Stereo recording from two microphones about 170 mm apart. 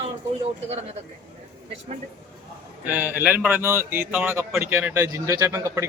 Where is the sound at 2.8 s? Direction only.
10° right (ahead or behind).